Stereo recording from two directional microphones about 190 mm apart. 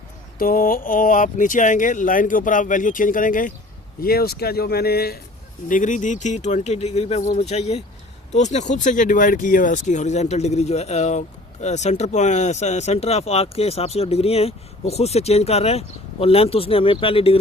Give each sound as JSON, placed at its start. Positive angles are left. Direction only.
{"t": 0.3, "sound": "speech", "side_deg": 50}
{"t": 5.6, "sound": "speech", "side_deg": 45}